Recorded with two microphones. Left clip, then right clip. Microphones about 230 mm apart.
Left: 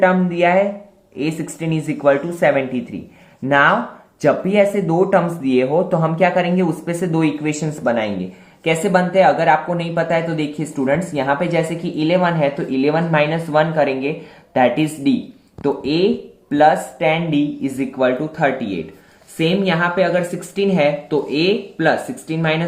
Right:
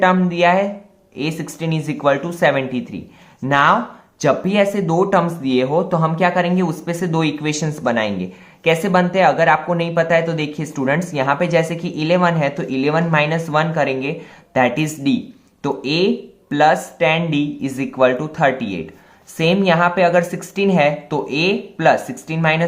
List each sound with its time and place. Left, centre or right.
0.0 s speech: right